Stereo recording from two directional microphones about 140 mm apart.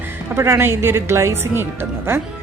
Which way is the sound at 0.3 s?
20° right (ahead or behind).